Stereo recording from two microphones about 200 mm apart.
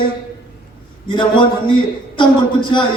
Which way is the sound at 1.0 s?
25° left (ahead or behind).